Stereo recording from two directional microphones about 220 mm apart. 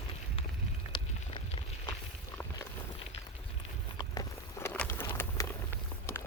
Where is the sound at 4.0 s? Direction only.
15° left (ahead or behind).